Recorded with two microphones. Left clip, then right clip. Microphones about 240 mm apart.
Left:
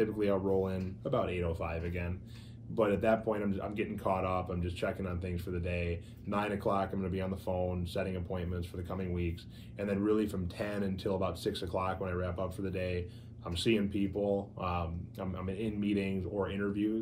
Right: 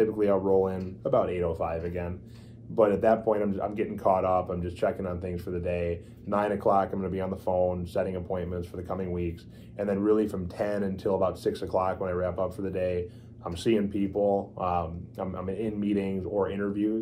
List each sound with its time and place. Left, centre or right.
0.0 s speech: centre
7.2 s speech: left
7.6 s speech: centre